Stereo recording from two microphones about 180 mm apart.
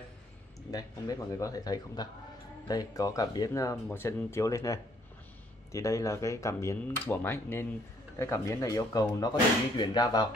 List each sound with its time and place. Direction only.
0.7 s speech: 20° left (ahead or behind)